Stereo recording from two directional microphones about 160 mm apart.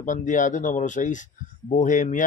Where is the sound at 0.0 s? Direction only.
55° left (ahead or behind).